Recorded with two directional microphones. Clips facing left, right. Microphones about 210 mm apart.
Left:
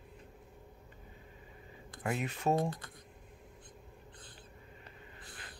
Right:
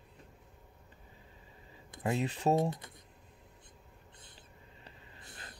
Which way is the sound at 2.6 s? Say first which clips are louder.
Right 2 dB; 20° right (ahead or behind).